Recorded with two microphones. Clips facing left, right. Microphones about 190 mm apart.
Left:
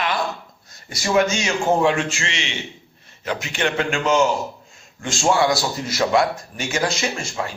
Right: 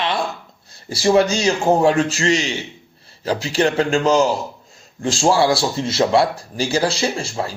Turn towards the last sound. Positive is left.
turn(degrees=-35)  # may be behind; listen again after turning